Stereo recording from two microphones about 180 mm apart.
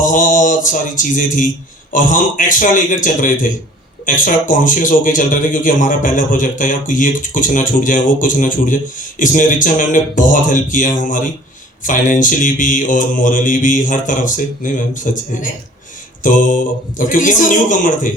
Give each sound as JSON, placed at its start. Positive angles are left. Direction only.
{"t": 0.0, "sound": "music", "side_deg": 45}
{"t": 1.9, "sound": "a man's voice", "side_deg": 45}